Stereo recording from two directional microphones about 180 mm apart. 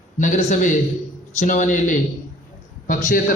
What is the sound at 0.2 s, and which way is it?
A man's voice, 45° left (ahead or behind).